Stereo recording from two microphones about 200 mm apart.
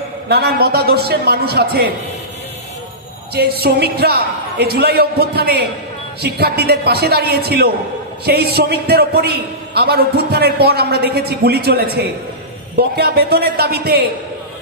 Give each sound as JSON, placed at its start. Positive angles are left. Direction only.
{"t": 0.6, "sound": "a man's voice", "side_deg": -50}
{"t": 3.3, "sound": "a man's voice", "side_deg": -50}